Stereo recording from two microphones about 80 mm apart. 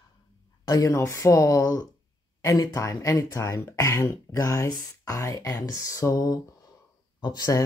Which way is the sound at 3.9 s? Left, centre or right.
Left.